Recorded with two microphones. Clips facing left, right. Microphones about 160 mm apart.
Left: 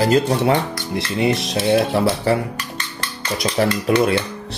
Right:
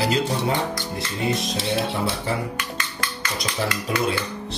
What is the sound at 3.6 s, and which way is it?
Cutlery, 70° left (ahead or behind).